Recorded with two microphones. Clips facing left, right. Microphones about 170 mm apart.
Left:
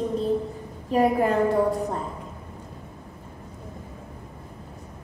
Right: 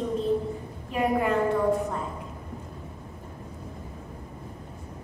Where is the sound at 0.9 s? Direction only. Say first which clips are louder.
Left 4 dB; 35° left (ahead or behind).